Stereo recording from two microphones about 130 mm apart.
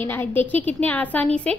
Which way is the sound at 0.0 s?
15° left (ahead or behind).